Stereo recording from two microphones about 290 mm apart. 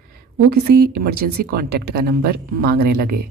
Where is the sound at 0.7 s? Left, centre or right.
Right.